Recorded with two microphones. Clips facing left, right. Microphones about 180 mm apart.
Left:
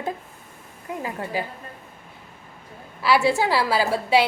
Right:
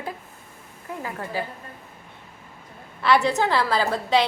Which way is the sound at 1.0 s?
15° left (ahead or behind).